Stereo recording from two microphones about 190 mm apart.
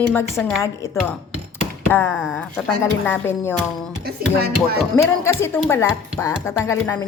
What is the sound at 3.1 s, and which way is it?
Speech, 10° left (ahead or behind).